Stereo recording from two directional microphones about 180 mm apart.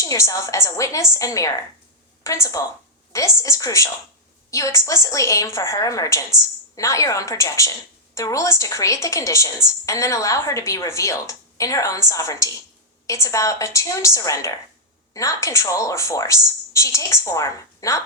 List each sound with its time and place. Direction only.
0.0 s a woman's voice: 20° left (ahead or behind)